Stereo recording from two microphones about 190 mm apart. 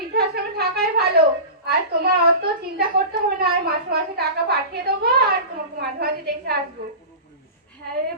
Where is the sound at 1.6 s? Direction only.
55° right (ahead or behind).